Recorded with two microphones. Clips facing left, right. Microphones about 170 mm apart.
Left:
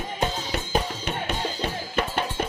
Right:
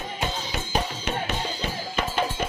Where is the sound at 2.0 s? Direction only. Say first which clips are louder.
Even; 60° left (ahead or behind).